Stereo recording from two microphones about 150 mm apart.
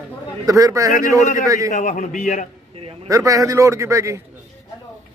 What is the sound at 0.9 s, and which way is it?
A man's voice, 55° left (ahead or behind).